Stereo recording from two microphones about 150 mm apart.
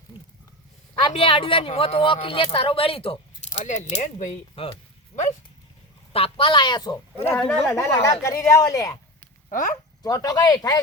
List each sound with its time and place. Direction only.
1.1 s speech: 35° left (ahead or behind)
4.5 s speech: 35° left (ahead or behind)
6.1 s speech: 40° left (ahead or behind)
7.3 s speech: 5° left (ahead or behind)
7.7 s a woman's voice: 20° left (ahead or behind)
9.5 s speech: 60° left (ahead or behind)
10.0 s a woman's voice: 25° left (ahead or behind)